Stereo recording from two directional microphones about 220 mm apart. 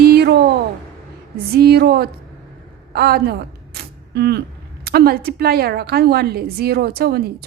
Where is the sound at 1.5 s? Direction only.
45° right (ahead or behind).